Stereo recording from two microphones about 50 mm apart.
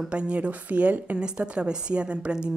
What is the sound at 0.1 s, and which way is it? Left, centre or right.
A woman's voice, right.